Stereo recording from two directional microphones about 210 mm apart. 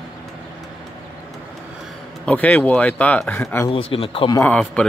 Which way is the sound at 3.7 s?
25° left (ahead or behind).